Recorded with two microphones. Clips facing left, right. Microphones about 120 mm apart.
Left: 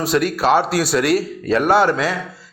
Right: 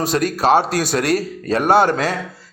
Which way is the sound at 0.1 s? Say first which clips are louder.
Even; 40° right (ahead or behind).